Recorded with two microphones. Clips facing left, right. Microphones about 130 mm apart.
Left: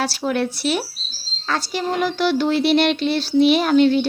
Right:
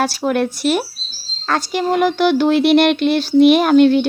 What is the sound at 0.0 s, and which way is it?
A woman's voice, 45° right (ahead or behind).